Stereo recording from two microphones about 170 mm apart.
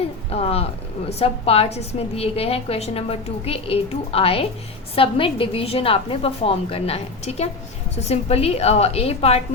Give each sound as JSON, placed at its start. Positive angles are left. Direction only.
{"t": 0.3, "sound": "a woman's voice", "side_deg": 35}